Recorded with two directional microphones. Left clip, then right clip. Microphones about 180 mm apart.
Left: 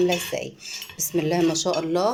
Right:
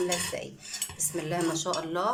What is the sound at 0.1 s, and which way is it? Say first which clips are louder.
Speech: left 6 dB; 20° left (ahead or behind).